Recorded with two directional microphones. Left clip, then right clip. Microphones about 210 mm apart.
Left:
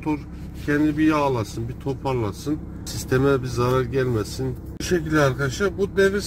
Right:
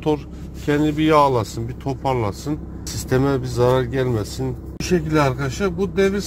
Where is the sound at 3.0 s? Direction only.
35° right (ahead or behind).